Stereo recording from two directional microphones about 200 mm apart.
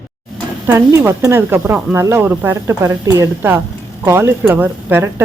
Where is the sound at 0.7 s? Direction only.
10° right (ahead or behind).